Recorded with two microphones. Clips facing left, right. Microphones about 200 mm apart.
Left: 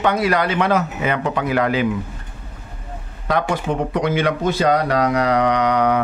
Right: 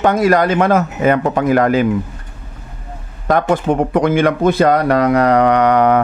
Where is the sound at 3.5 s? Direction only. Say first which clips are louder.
Right 6 dB; 50° right (ahead or behind).